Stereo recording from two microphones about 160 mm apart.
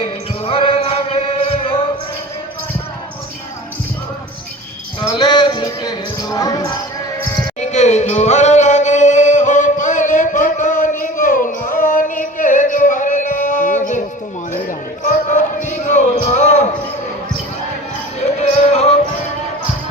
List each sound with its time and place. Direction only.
0.4 s music: 35° left (ahead or behind)
4.9 s music: 30° left (ahead or behind)
7.6 s singing: 45° left (ahead or behind)
11.0 s music: 55° left (ahead or behind)
14.5 s basketball bounce: 50° left (ahead or behind)
18.3 s music: 45° left (ahead or behind)